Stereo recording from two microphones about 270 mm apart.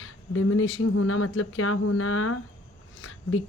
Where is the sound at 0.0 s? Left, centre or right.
Left.